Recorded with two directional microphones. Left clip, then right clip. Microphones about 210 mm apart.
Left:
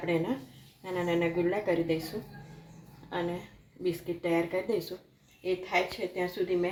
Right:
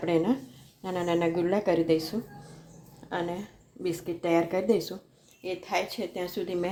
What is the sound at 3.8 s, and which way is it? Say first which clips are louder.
A woman's voice: right 1 dB; 40° right (ahead or behind).